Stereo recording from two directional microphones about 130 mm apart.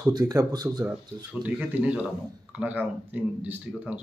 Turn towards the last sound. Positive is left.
turn(degrees=-10)  # may be behind; listen again after turning